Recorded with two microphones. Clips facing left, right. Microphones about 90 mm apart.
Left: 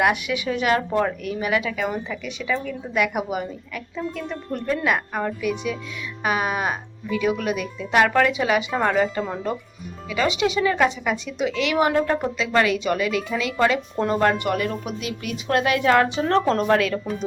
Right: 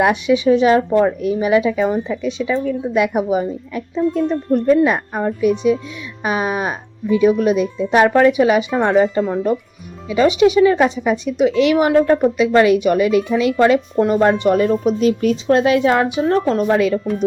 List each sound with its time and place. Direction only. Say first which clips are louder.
0.0 s speech: right 7 dB; 25° right (ahead or behind); by 17.2 s 5° right (ahead or behind)